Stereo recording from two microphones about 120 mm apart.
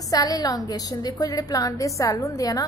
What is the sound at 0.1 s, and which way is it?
A woman's voice, 30° left (ahead or behind).